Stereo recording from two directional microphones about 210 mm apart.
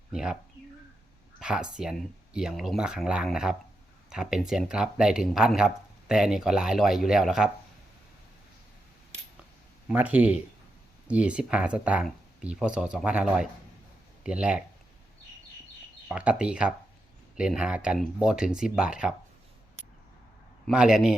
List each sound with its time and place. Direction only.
0.1 s speech: 5° right (ahead or behind)
1.4 s speech: 5° right (ahead or behind)
9.9 s speech: 5° right (ahead or behind)
16.0 s speech: 5° right (ahead or behind)
20.7 s speech: 5° right (ahead or behind)